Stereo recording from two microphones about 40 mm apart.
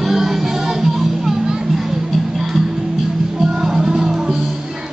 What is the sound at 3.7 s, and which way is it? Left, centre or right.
Music, centre.